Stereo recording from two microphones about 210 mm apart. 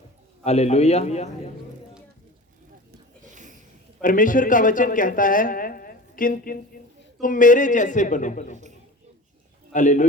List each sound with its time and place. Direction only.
0.4 s speech: 30° left (ahead or behind)
3.3 s a sound: 35° right (ahead or behind)
4.0 s speech: 40° left (ahead or behind)
9.7 s speech: 35° left (ahead or behind)